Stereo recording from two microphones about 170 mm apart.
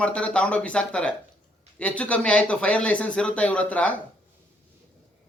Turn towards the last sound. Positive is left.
turn(degrees=10)  # may be behind; listen again after turning